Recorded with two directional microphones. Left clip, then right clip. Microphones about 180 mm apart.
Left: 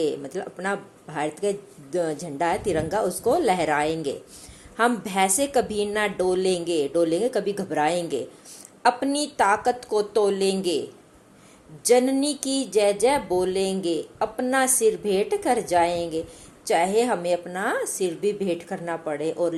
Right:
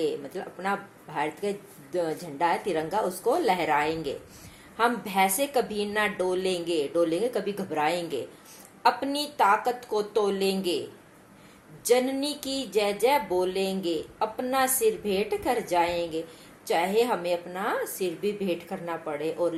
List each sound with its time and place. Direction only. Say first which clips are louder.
0.3 s speech: left 2 dB; 45° left (ahead or behind)
11.9 s speech: left 4 dB; 40° left (ahead or behind)